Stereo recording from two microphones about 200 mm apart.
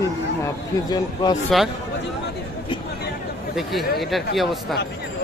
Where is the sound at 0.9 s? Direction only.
20° left (ahead or behind).